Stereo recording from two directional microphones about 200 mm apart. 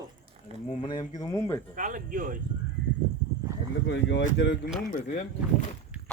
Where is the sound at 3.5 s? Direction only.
15° right (ahead or behind).